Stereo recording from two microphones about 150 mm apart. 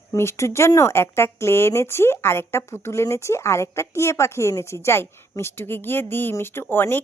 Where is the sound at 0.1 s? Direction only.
20° left (ahead or behind).